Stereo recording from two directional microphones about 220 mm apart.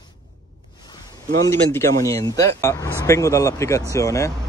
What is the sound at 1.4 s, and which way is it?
Speech, 15° left (ahead or behind).